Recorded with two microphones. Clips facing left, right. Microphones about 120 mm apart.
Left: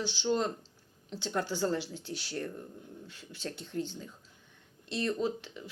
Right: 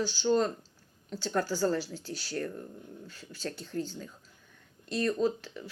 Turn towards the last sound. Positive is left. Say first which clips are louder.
# right 4 dB
turn(degrees=20)  # may be behind; listen again after turning